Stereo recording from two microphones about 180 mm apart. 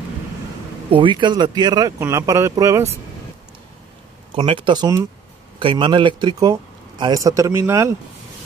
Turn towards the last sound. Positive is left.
turn(degrees=-15)  # may be behind; listen again after turning